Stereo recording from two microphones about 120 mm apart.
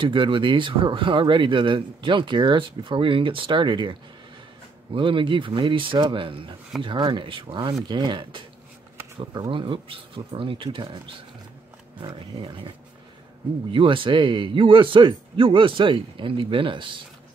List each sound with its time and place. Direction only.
0.0 s speech: 45° right (ahead or behind)